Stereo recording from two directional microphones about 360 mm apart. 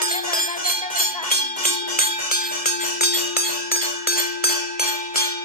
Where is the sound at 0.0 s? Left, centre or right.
Left.